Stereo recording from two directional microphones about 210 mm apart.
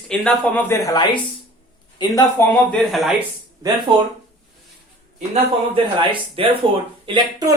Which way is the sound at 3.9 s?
25° right (ahead or behind).